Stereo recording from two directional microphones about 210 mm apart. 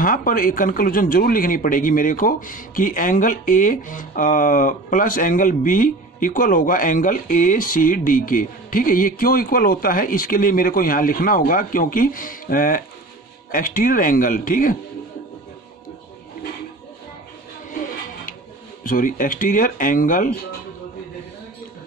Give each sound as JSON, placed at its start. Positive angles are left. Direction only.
{"t": 0.0, "sound": "speech", "side_deg": 40}
{"t": 18.9, "sound": "speech", "side_deg": 40}